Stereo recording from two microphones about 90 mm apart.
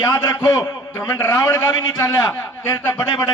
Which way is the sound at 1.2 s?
30° left (ahead or behind).